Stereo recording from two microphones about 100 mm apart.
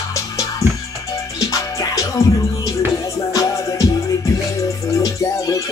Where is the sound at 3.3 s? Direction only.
35° left (ahead or behind).